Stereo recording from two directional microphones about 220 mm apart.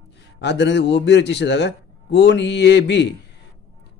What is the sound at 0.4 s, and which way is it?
Speech, 50° left (ahead or behind).